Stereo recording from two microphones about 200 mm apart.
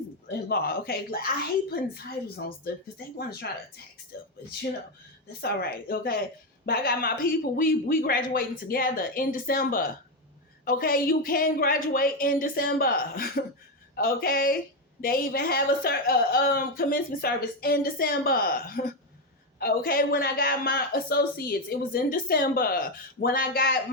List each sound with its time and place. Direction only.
0.3 s speech: 55° left (ahead or behind)
5.4 s speech: 50° left (ahead or behind)